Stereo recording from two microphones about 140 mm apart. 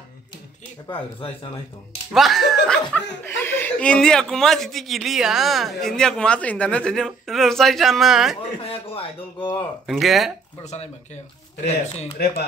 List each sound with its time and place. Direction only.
2.1 s speech: centre (ahead or behind)
3.3 s speech: 15° left (ahead or behind); by 8.4 s centre (ahead or behind)
8.4 s a man's voice: 45° left (ahead or behind)
9.8 s speech: centre (ahead or behind)
10.6 s speech: 55° left (ahead or behind)
12.2 s speech: 90° left